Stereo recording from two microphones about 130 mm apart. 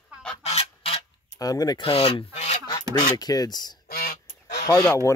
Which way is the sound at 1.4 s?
30° left (ahead or behind).